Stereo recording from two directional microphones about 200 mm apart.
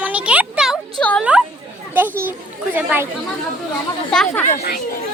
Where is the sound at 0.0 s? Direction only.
5° right (ahead or behind).